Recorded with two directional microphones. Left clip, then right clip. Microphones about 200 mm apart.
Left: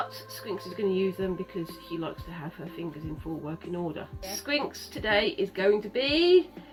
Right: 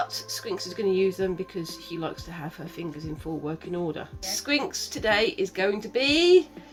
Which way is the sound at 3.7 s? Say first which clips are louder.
Right 2 dB; 45° right (ahead or behind).